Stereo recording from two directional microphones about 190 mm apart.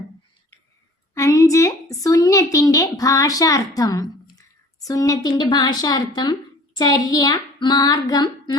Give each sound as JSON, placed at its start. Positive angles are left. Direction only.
{"t": 1.1, "sound": "a woman's voice", "side_deg": 15}
{"t": 6.7, "sound": "child singing", "side_deg": 20}